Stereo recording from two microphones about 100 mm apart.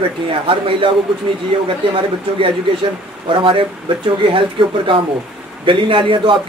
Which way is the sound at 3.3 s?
60° right (ahead or behind).